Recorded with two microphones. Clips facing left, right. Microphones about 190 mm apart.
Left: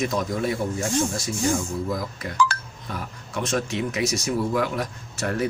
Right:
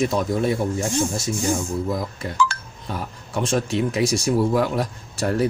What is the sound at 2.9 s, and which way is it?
Speech, 30° right (ahead or behind).